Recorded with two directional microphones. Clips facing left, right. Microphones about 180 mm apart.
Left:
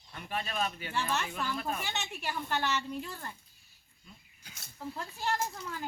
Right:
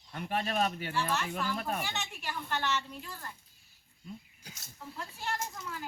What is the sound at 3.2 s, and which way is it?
Speech, 25° left (ahead or behind).